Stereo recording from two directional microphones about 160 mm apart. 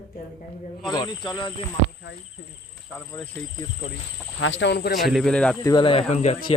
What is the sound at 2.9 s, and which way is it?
Insect, 15° left (ahead or behind).